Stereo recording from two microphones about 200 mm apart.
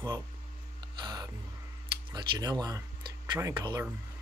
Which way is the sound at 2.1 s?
20° right (ahead or behind).